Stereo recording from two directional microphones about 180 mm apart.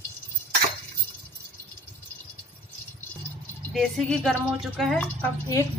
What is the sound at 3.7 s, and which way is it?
Speech, centre (ahead or behind).